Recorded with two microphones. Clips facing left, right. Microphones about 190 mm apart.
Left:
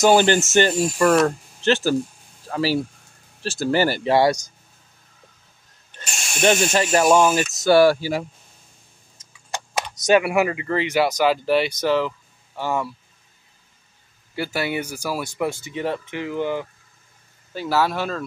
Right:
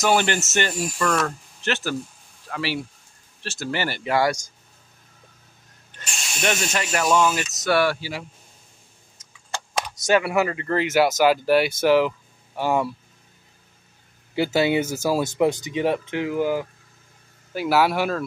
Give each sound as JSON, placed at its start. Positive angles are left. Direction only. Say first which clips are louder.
{"t": 0.0, "sound": "speech", "louder": "left 5 dB", "side_deg": 30}
{"t": 6.0, "sound": "speech", "louder": "left 6 dB", "side_deg": 30}
{"t": 9.2, "sound": "tick", "louder": "even", "side_deg": 30}
{"t": 9.9, "sound": "speech", "louder": "left 3 dB", "side_deg": 20}
{"t": 10.7, "sound": "speech", "louder": "right 1 dB", "side_deg": 0}
{"t": 14.3, "sound": "speech", "louder": "right 5 dB", "side_deg": -20}